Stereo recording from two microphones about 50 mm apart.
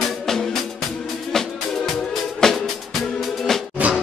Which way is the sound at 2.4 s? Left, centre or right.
Centre.